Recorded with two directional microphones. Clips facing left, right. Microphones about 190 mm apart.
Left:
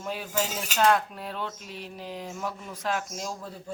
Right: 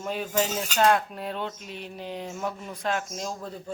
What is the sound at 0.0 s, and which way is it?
Cutlery, 5° left (ahead or behind).